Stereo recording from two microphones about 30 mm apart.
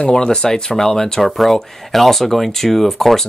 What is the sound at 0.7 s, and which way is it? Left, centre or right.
Speech, centre.